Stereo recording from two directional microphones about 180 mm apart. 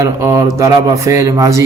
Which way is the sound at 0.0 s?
15° right (ahead or behind).